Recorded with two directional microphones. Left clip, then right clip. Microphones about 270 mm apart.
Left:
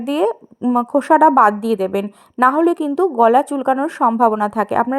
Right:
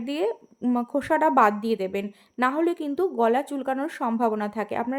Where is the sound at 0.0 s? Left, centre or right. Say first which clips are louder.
Left 9 dB; left.